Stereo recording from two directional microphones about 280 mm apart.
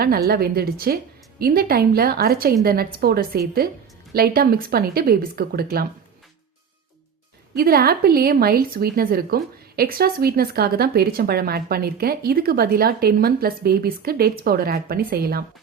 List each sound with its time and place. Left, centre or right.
0.3 s speech: right
7.5 s speech: right